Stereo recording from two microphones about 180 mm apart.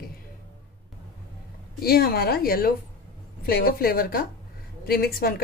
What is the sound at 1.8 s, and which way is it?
A woman's voice, 60° left (ahead or behind).